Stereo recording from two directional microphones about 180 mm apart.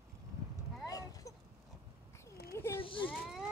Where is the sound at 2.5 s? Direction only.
15° left (ahead or behind).